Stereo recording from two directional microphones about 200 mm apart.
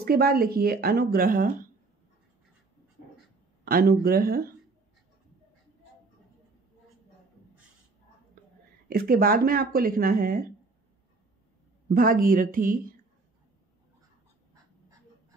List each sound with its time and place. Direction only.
0.0 s speech: 50° right (ahead or behind)
3.6 s speech: 50° right (ahead or behind)
8.8 s speech: 50° right (ahead or behind)
11.9 s speech: 45° right (ahead or behind)